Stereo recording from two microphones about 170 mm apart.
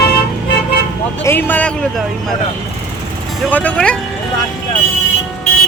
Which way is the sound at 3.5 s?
10° left (ahead or behind).